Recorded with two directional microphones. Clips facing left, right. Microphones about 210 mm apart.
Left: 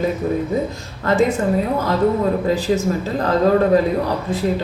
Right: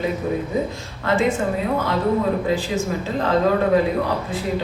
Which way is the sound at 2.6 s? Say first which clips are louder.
Left 5 dB; 40° left (ahead or behind).